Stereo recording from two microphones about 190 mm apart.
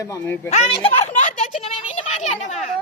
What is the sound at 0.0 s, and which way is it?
Speech, 15° left (ahead or behind).